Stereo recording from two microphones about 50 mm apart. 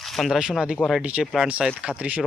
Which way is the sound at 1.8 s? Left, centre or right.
Right.